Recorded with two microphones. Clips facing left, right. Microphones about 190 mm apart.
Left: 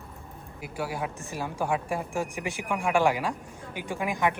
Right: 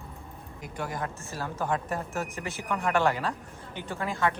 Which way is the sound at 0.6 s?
5° left (ahead or behind).